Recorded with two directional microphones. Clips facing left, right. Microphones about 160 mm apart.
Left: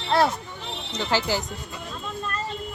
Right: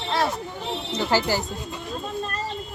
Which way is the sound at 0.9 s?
10° right (ahead or behind).